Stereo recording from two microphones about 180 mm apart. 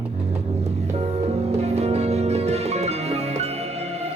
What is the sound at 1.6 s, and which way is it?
Music, 35° right (ahead or behind).